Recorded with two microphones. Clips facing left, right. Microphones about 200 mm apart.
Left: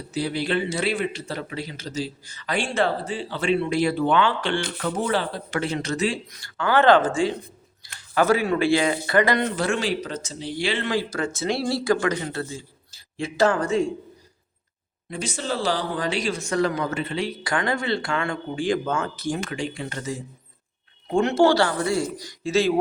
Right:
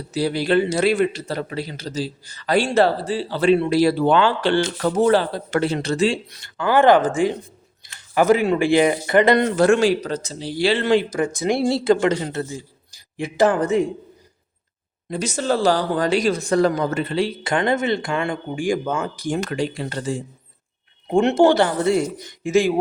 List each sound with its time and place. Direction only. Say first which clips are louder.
0.1 s a man's voice: right 6 dB; 40° right (ahead or behind)
6.6 s a man's voice: right 3 dB; 15° right (ahead or behind)
9.6 s a man's voice: right 9 dB; 45° right (ahead or behind)
11.1 s speech: right 5 dB; 15° right (ahead or behind)
15.1 s a man's voice: right 6 dB; 45° right (ahead or behind); by 19.4 s 15° right (ahead or behind)
19.4 s a man's voice: right 5 dB; 40° right (ahead or behind)
21.1 s speech: right 3 dB; 20° right (ahead or behind)